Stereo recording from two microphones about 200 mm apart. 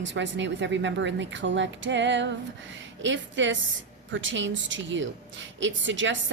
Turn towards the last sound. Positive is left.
turn(degrees=-70)  # may be behind; listen again after turning